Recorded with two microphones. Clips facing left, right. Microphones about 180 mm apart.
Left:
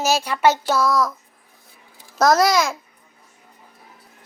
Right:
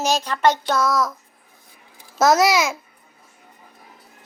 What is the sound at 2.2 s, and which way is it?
Speech, 5° right (ahead or behind).